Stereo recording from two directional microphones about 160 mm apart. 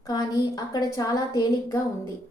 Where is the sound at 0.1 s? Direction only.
25° left (ahead or behind).